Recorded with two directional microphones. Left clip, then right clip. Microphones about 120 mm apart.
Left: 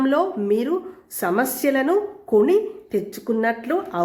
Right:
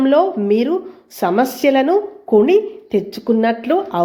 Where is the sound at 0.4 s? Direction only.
20° right (ahead or behind).